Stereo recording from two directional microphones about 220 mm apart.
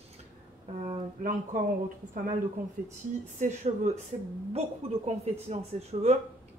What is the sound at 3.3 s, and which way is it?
Speech, 35° right (ahead or behind).